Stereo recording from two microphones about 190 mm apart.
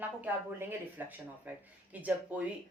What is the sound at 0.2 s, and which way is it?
Speech, 10° right (ahead or behind).